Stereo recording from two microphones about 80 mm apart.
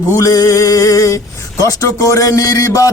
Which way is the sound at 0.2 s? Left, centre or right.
Left.